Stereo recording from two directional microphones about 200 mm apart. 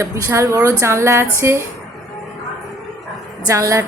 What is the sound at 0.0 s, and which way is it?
A woman's voice, 15° right (ahead or behind).